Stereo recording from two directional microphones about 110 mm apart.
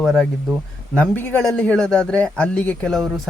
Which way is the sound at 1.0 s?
10° left (ahead or behind).